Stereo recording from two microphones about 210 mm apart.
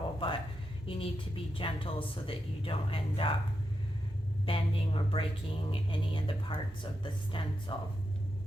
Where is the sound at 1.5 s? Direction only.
25° left (ahead or behind).